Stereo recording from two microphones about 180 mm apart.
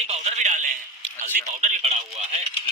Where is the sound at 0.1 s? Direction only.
40° right (ahead or behind).